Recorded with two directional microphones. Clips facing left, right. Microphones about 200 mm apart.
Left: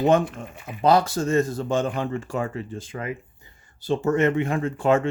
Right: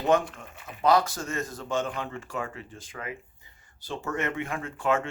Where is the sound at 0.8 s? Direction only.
30° left (ahead or behind).